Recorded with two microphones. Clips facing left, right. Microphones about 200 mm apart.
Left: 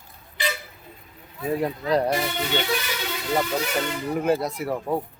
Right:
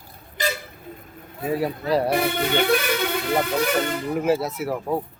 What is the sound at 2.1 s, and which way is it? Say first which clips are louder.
Speech: right 4 dB; 55° right (ahead or behind).